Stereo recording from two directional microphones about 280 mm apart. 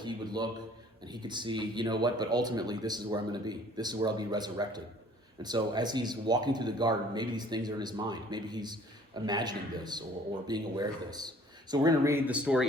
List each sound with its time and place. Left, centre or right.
0.0 s speech: centre